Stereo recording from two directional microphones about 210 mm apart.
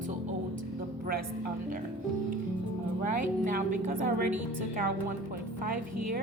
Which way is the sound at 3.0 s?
40° right (ahead or behind).